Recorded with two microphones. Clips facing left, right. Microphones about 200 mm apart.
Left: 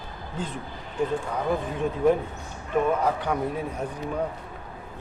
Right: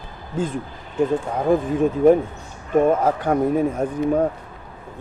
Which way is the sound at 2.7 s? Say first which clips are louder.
Right 6 dB; 45° right (ahead or behind).